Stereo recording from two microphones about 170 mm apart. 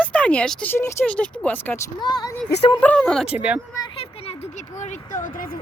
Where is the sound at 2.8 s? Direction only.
5° left (ahead or behind).